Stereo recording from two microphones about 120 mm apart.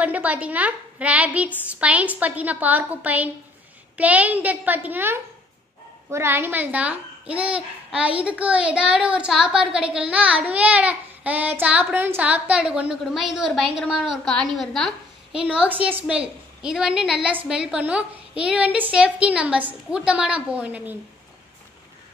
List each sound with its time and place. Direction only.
0.0 s a woman's voice: 10° right (ahead or behind)
15.3 s a woman's voice: 10° right (ahead or behind)